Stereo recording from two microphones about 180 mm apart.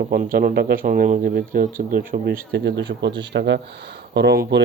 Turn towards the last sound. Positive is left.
turn(degrees=-70)  # may be behind; listen again after turning